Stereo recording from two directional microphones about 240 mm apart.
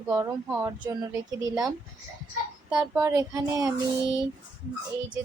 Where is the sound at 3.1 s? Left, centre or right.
Centre.